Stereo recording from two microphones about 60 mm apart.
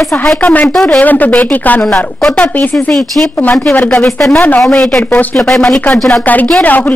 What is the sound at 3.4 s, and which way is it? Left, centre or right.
Speech, left.